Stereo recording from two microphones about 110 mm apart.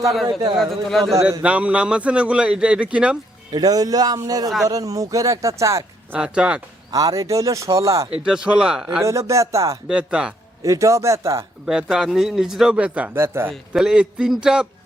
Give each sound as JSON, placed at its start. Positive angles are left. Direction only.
{"t": 0.0, "sound": "speech", "side_deg": 0}
{"t": 1.4, "sound": "a man's voice", "side_deg": -10}
{"t": 3.5, "sound": "speech", "side_deg": -35}
{"t": 6.1, "sound": "a man's voice", "side_deg": -10}
{"t": 6.9, "sound": "speech", "side_deg": -30}
{"t": 8.2, "sound": "a man's voice", "side_deg": -5}
{"t": 9.0, "sound": "speech", "side_deg": -30}
{"t": 9.9, "sound": "a man's voice", "side_deg": -10}
{"t": 10.6, "sound": "speech", "side_deg": -30}
{"t": 11.6, "sound": "a man's voice", "side_deg": -5}
{"t": 13.1, "sound": "speech", "side_deg": -20}
{"t": 13.5, "sound": "a man's voice", "side_deg": -5}